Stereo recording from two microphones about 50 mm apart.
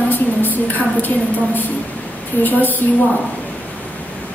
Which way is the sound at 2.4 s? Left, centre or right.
Left.